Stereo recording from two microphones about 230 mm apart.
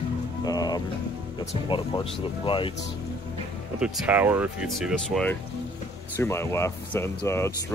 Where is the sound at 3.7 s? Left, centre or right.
Centre.